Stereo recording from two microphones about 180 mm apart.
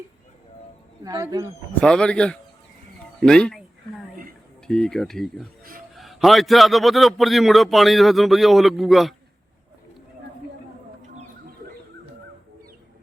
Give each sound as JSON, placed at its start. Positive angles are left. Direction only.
{"t": 1.0, "sound": "speech", "side_deg": -20}
{"t": 1.8, "sound": "a man's voice", "side_deg": 5}
{"t": 4.6, "sound": "a man's voice", "side_deg": 5}